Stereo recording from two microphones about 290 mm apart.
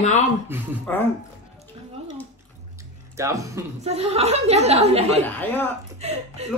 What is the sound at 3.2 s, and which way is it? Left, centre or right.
Speech, centre.